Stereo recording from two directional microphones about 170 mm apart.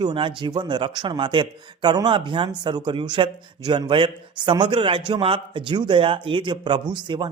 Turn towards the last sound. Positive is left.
turn(degrees=-25)  # may be behind; listen again after turning